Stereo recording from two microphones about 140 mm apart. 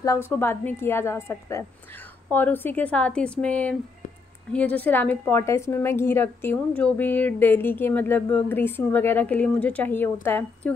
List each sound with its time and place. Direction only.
0.0 s a woman's voice: 20° left (ahead or behind)